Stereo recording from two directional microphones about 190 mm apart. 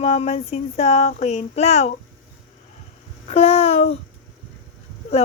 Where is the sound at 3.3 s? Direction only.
30° left (ahead or behind).